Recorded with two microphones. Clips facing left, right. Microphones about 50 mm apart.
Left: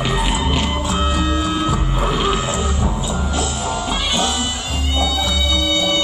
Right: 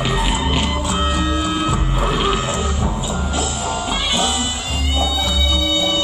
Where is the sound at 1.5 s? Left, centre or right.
Centre.